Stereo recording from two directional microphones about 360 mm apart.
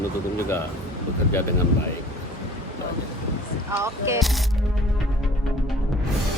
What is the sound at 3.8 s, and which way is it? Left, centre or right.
Speech, centre.